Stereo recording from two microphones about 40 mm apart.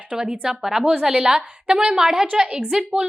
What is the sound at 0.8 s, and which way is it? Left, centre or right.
A woman's voice, right.